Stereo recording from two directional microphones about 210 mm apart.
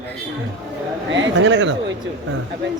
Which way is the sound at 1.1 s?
60° right (ahead or behind).